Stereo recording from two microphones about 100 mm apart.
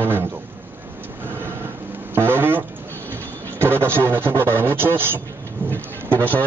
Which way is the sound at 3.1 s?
20° right (ahead or behind).